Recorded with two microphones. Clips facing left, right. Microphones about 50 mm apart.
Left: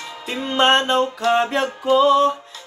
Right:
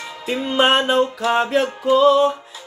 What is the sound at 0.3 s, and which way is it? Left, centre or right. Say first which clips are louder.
Music: even; centre.